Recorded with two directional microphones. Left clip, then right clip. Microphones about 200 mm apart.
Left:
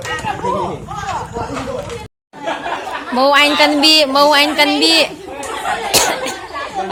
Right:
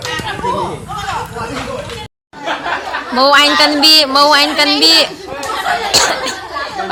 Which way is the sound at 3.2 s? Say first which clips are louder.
Right 2 dB; 15° left (ahead or behind).